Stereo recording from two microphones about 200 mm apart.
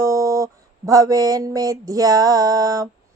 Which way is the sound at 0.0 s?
15° right (ahead or behind).